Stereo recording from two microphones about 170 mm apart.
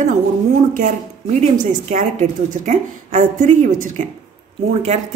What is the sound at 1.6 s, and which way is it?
A woman's voice, 45° right (ahead or behind).